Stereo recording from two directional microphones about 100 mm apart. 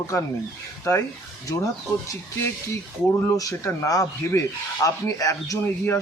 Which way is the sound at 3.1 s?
35° left (ahead or behind).